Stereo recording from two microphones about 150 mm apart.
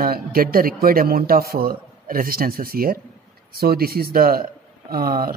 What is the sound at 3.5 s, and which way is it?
Speech, 90° right.